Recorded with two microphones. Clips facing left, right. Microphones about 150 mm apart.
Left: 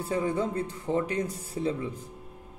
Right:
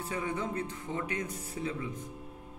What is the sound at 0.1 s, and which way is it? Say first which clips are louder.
Speech: left 7 dB; 35° left (ahead or behind).